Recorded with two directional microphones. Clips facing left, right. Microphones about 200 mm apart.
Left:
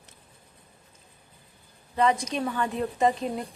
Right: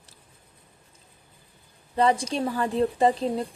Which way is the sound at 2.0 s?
30° right (ahead or behind).